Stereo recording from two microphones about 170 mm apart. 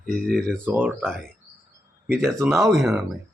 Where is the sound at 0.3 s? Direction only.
5° left (ahead or behind).